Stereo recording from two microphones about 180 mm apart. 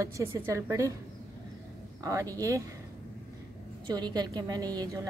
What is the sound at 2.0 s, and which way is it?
Speech, 20° right (ahead or behind).